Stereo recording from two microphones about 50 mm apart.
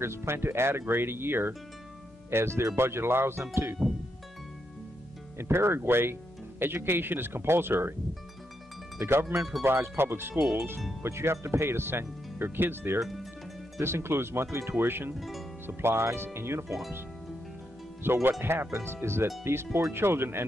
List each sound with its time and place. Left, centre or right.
0.0 s speech: right
2.3 s speech: right
3.8 s music: right
5.4 s speech: right
9.0 s speech: right
11.0 s speech: right
13.0 s music: centre
13.7 s speech: right
15.1 s speech: centre
15.6 s speech: right
18.0 s speech: right